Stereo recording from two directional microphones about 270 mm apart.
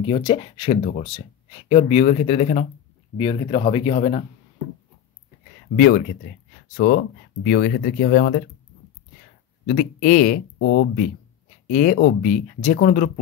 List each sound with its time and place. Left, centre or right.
0.0 s speech: centre
5.8 s speech: left
9.7 s speech: left
10.6 s speech: left
11.7 s speech: left